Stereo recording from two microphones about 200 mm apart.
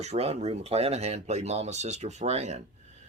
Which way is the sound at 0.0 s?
30° right (ahead or behind).